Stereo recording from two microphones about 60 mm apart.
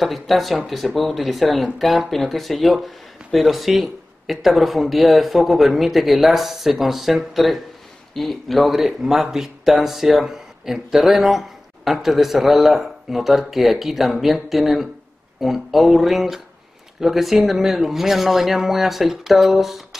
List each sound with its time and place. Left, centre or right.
0.0 s speech: centre